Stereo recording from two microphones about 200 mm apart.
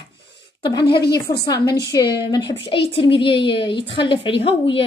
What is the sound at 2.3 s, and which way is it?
A woman's voice, 20° left (ahead or behind).